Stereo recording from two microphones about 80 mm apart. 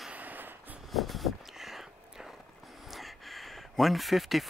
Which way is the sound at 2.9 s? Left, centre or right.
Centre.